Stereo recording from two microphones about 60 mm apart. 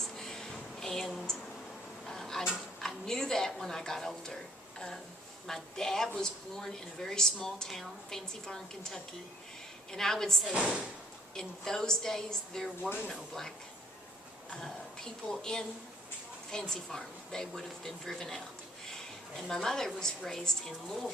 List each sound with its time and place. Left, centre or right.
0.2 s a sound: centre
5.5 s a woman's voice: centre
10.5 s speech: centre
11.3 s a woman's voice: centre
15.3 s a woman's voice: centre